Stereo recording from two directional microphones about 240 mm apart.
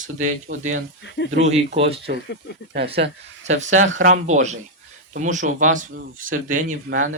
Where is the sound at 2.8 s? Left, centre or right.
Right.